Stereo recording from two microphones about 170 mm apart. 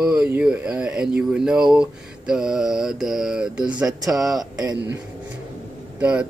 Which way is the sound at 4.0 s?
20° right (ahead or behind).